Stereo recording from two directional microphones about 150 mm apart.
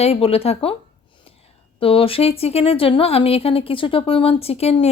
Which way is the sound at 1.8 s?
40° left (ahead or behind).